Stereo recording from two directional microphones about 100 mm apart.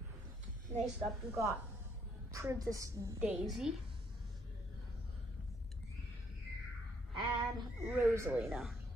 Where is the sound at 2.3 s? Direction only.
30° right (ahead or behind).